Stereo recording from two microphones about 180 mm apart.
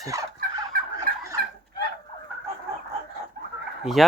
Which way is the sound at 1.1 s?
55° right (ahead or behind).